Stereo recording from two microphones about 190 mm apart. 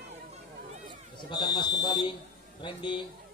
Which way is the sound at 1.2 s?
20° left (ahead or behind).